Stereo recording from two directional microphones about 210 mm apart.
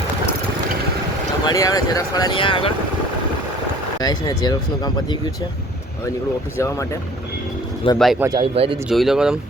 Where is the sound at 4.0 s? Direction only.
20° left (ahead or behind).